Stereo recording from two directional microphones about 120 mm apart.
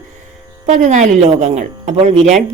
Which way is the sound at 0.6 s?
80° right.